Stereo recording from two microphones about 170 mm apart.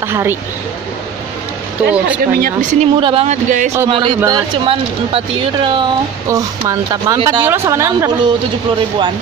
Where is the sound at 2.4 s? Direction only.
55° right (ahead or behind).